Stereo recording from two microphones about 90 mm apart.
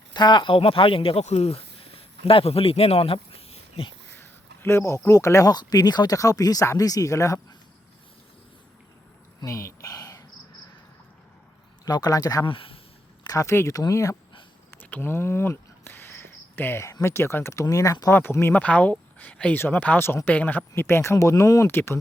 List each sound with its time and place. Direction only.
0.1 s speech: 55° left (ahead or behind)
0.5 s speech: 90° left
1.5 s a sound: 90° left
4.1 s speech: 25° left (ahead or behind)
9.4 s a sound: 35° left (ahead or behind)
11.9 s a man's voice: 50° left (ahead or behind)
12.5 s speech: 85° left
13.2 s speech: 40° left (ahead or behind)
14.7 s a sound: 20° left (ahead or behind)
17.0 s speech: 30° left (ahead or behind)
18.1 s speech: 25° left (ahead or behind)
18.5 s speech: 15° left (ahead or behind); by 21.7 s 35° left (ahead or behind)
21.7 s speech: 25° left (ahead or behind)